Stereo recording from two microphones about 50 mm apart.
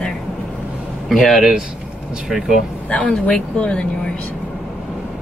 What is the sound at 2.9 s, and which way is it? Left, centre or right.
Speech, left.